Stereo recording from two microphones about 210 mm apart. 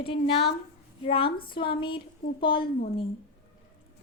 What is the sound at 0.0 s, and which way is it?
A woman's voice, 25° left (ahead or behind).